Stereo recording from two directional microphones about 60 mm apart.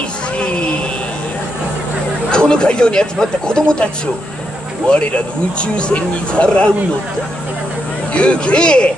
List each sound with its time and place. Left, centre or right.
2.3 s speech: centre
4.8 s speech: centre
8.1 s speech: centre